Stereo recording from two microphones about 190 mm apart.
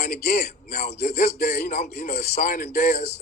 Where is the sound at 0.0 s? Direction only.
55° left (ahead or behind).